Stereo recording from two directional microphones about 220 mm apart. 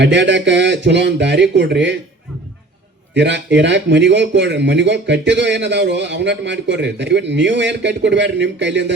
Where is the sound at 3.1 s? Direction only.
55° right (ahead or behind).